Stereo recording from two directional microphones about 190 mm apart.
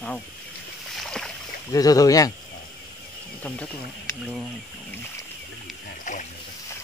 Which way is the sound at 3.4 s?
5° left (ahead or behind).